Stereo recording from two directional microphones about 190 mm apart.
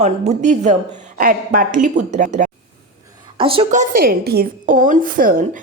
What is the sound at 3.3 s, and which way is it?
Speech, 30° right (ahead or behind).